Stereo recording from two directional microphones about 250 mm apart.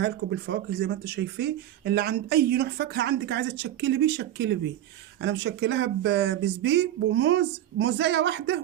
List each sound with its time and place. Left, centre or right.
0.0 s speech: right